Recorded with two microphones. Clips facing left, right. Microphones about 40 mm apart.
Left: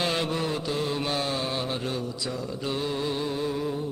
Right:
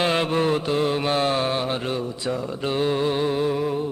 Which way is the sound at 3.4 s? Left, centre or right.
Right.